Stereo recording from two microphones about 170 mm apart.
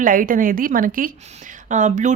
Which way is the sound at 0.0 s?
55° right (ahead or behind).